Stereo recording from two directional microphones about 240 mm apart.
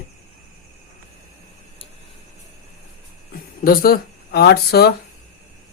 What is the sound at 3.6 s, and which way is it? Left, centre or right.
Speech, left.